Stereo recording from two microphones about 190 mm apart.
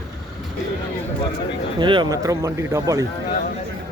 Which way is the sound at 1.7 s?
25° right (ahead or behind).